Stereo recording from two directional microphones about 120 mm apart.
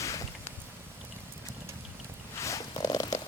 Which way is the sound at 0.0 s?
25° left (ahead or behind).